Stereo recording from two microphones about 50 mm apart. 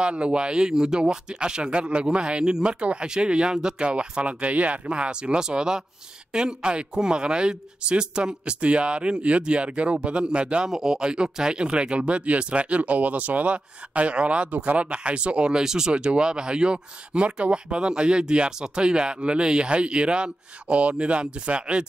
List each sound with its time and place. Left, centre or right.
0.0 s speech: right